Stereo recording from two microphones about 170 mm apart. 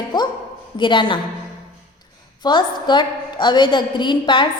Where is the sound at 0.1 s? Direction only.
25° left (ahead or behind).